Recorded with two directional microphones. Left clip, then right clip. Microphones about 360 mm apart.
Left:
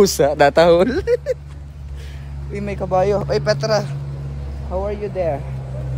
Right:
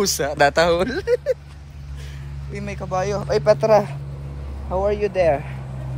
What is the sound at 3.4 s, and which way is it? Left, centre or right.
Speech, centre.